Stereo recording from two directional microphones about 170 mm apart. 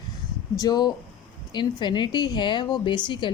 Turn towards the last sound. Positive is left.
turn(degrees=30)  # may be behind; listen again after turning